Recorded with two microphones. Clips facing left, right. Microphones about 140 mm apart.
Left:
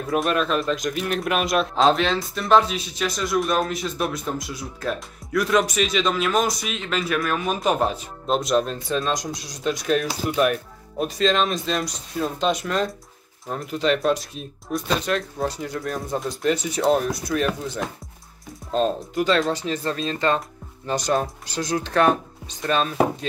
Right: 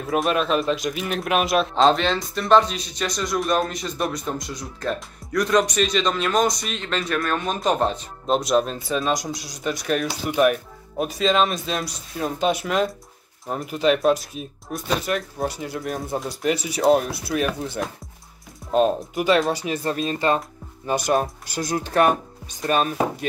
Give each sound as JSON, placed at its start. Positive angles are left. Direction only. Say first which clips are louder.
{"t": 0.0, "sound": "speech", "louder": "even", "side_deg": 0}
{"t": 12.4, "sound": "speech", "louder": "right 2 dB", "side_deg": -55}
{"t": 12.6, "sound": "speech", "louder": "right 2 dB", "side_deg": -10}